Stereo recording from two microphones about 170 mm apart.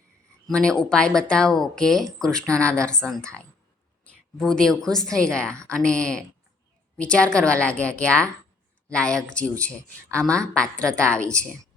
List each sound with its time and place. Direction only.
0.4 s a woman's voice: 5° left (ahead or behind)